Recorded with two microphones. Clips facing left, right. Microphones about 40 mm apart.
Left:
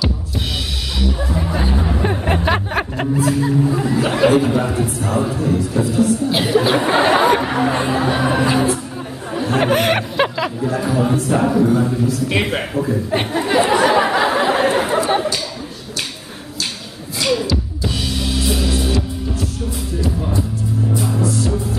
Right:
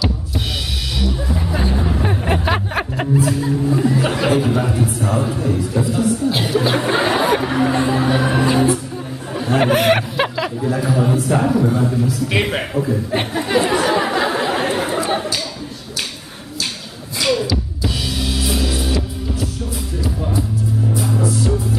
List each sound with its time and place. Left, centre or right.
1.3 s music: centre
3.3 s speech: centre
6.3 s a sound: centre
7.2 s chatter: centre
7.9 s music: centre
9.3 s speech: centre
12.8 s a sound: centre
17.2 s music: centre
20.9 s music: centre